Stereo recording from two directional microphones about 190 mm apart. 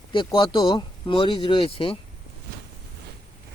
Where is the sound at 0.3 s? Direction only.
20° left (ahead or behind).